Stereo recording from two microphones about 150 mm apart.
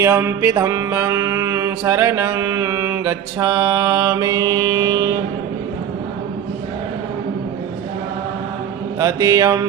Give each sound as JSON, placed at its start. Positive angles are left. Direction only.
{"t": 0.0, "sound": "mantra", "side_deg": -15}
{"t": 9.0, "sound": "mantra", "side_deg": -20}